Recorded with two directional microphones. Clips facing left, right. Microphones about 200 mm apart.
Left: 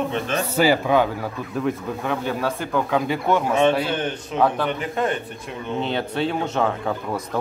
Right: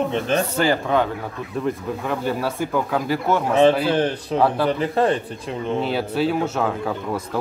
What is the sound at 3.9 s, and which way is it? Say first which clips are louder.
Speech: right 5 dB; 35° right (ahead or behind).